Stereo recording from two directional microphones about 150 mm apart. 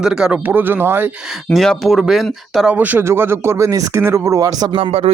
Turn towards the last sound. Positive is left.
turn(degrees=-40)  # may be behind; listen again after turning